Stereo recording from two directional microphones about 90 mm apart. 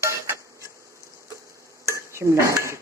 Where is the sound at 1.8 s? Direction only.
30° right (ahead or behind).